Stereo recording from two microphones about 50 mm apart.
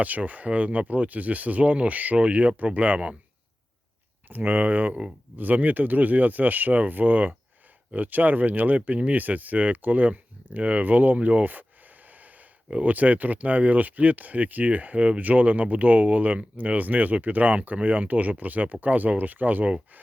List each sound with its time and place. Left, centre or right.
0.0 s speech: right
4.3 s speech: right